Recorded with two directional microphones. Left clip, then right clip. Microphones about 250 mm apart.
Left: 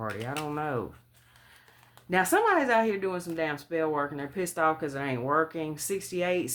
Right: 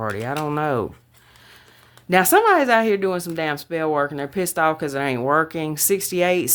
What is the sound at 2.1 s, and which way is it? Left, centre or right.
Speech, right.